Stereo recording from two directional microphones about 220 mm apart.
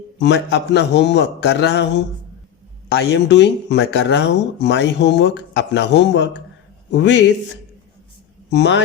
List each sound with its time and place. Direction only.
0.2 s speech: 50° left (ahead or behind)